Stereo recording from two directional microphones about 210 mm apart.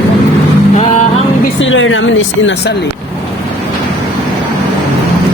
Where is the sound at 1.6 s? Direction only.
65° left (ahead or behind).